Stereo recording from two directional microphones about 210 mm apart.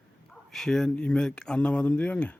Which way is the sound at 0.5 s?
5° left (ahead or behind).